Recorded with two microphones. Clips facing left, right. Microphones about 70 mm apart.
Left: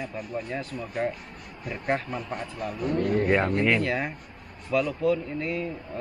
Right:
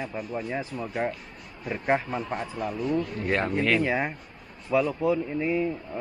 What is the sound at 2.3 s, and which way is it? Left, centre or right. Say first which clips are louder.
Speech: right 2 dB; right.